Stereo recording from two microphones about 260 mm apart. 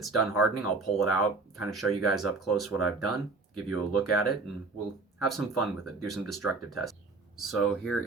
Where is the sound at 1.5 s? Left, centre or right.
Centre.